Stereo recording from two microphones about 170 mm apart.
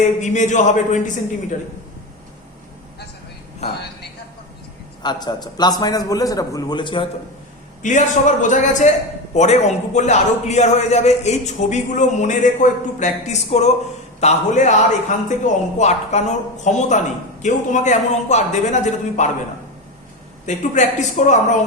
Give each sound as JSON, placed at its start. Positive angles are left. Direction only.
{"t": 0.0, "sound": "a man's voice", "side_deg": 45}
{"t": 5.0, "sound": "a man's voice", "side_deg": 25}
{"t": 7.8, "sound": "a man's voice", "side_deg": 45}
{"t": 20.5, "sound": "a man's voice", "side_deg": 45}